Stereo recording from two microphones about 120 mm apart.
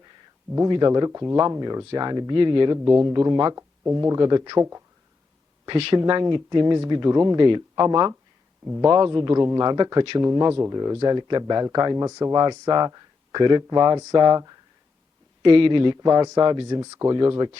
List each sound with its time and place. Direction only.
0.7 s speech: 35° right (ahead or behind)
2.7 s speech: 25° right (ahead or behind)
4.5 s speech: 25° right (ahead or behind)
5.6 s speech: 45° right (ahead or behind)
8.6 s speech: 20° right (ahead or behind)
8.9 s speech: 30° right (ahead or behind)
15.4 s speech: 45° right (ahead or behind)